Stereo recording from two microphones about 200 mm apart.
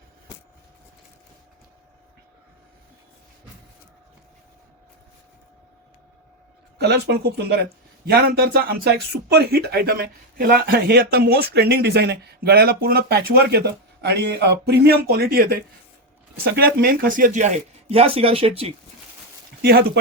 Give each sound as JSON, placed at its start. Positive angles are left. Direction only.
{"t": 6.7, "sound": "speech", "side_deg": -55}
{"t": 19.6, "sound": "speech", "side_deg": -50}